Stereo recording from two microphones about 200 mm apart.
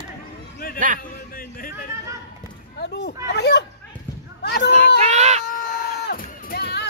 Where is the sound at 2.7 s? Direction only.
55° left (ahead or behind).